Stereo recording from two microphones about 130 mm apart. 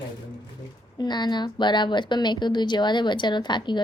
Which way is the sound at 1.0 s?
35° left (ahead or behind).